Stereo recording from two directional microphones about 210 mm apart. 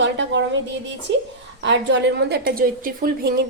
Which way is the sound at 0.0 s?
60° right (ahead or behind).